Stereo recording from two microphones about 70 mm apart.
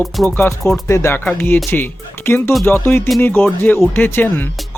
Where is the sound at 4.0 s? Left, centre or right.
Left.